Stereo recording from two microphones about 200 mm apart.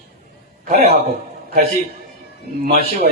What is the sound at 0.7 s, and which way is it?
Speech, 30° right (ahead or behind).